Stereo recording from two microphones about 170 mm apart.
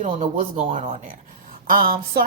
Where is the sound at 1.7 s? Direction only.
55° right (ahead or behind).